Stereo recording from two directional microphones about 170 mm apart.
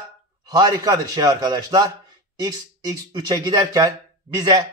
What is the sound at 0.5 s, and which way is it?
A man's voice, 20° right (ahead or behind).